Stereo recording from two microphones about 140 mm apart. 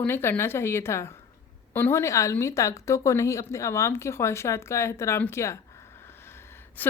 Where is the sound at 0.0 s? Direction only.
15° left (ahead or behind).